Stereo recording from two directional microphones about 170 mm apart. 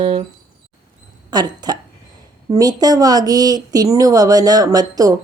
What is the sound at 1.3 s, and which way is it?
Speech, 25° right (ahead or behind).